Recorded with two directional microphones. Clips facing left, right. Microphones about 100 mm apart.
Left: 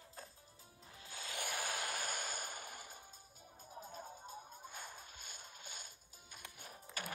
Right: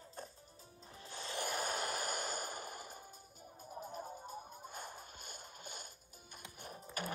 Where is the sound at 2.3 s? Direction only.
40° right (ahead or behind).